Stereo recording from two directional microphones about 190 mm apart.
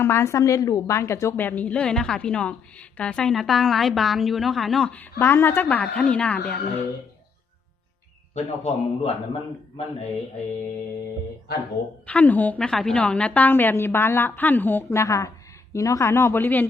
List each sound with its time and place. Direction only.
0.0 s a woman's voice: 15° left (ahead or behind)
8.4 s a man's voice: 35° left (ahead or behind)
12.0 s a woman's voice: 10° left (ahead or behind)